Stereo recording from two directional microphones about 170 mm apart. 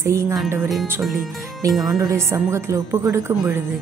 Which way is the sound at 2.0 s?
15° right (ahead or behind).